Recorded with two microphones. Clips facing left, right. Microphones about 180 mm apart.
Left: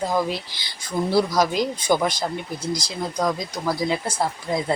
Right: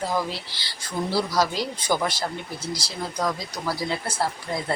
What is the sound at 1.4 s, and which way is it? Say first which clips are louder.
Speech: left 3 dB; 15° left (ahead or behind).